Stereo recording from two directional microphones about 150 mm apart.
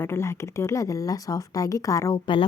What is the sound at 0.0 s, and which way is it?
Speech, 15° left (ahead or behind).